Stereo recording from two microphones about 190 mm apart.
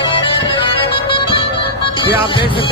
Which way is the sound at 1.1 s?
25° left (ahead or behind).